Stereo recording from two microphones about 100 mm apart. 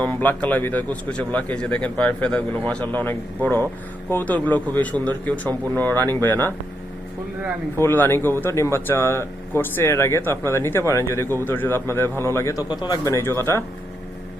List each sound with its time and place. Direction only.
0.0 s speech: 15° left (ahead or behind)
7.8 s speech: 20° left (ahead or behind)
12.6 s speech: 45° left (ahead or behind); by 13.7 s 25° left (ahead or behind)